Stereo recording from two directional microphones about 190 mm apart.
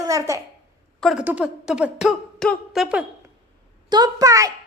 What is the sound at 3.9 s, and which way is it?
Speech, 20° right (ahead or behind).